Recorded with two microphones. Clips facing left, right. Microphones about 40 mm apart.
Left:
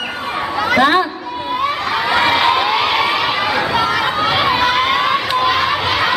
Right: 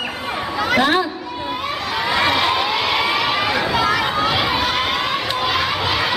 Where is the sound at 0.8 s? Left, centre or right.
Centre.